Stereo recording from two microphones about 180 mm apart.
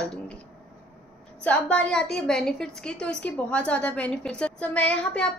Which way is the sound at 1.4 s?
5° left (ahead or behind).